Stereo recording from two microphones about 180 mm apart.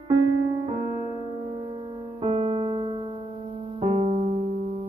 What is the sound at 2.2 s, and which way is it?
Music, 30° right (ahead or behind).